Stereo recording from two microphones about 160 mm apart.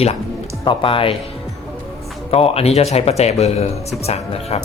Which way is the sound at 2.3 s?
40° left (ahead or behind).